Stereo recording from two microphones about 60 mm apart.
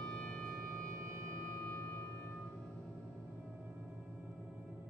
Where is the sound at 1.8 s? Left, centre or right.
Left.